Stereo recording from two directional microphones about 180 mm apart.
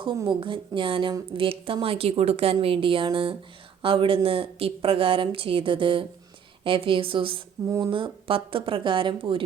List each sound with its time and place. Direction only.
0.0 s a woman's voice: 25° right (ahead or behind)